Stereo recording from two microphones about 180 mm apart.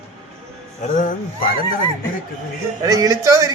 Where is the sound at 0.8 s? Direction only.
45° left (ahead or behind).